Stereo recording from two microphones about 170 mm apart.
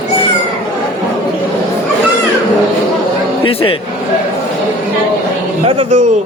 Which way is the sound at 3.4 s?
30° left (ahead or behind).